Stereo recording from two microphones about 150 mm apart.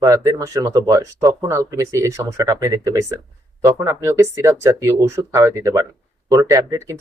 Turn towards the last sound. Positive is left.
turn(degrees=-20)  # may be behind; listen again after turning